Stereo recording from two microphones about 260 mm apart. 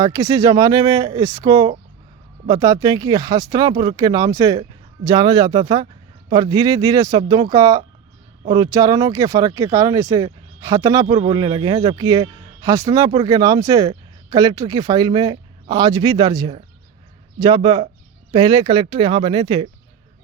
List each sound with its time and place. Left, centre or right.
0.0 s speech: centre